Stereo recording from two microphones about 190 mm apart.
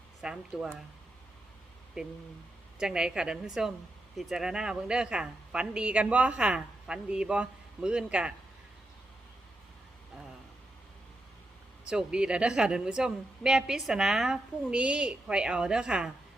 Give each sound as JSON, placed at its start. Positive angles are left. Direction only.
{"t": 0.2, "sound": "a woman's voice", "side_deg": -5}
{"t": 2.0, "sound": "a woman's voice", "side_deg": 0}
{"t": 11.9, "sound": "a woman's voice", "side_deg": -5}